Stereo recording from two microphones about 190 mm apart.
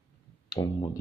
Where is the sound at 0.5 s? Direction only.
20° left (ahead or behind).